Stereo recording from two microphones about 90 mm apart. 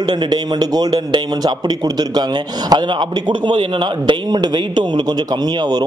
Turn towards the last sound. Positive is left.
turn(degrees=-50)  # may be behind; listen again after turning